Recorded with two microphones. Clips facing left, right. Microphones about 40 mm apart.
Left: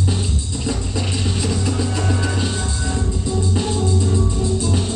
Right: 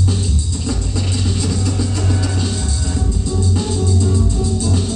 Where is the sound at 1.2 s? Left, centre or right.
Centre.